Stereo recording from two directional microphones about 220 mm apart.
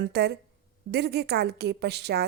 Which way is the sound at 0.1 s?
45° right (ahead or behind).